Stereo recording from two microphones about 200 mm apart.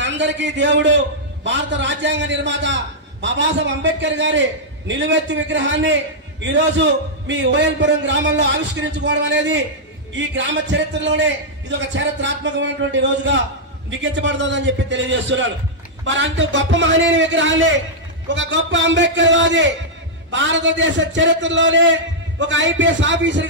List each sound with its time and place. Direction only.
0.0 s a man's voice: 65° right (ahead or behind)